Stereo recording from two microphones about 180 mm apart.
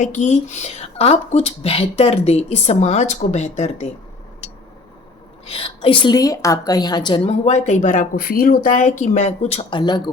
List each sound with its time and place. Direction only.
0.0 s a woman's voice: 40° left (ahead or behind)
5.5 s a woman's voice: 30° left (ahead or behind)